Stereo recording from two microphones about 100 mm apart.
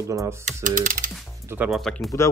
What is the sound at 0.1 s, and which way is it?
Speech, 30° right (ahead or behind).